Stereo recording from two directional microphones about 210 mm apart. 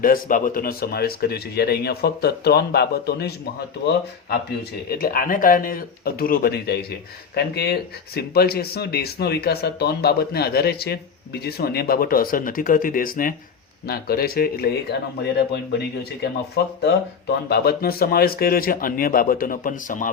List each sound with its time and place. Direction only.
0.0 s speech: 40° left (ahead or behind)
16.8 s speech: 50° left (ahead or behind)